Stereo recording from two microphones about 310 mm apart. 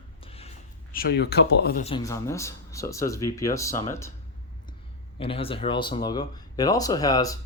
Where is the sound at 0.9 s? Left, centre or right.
Left; by 4.1 s centre.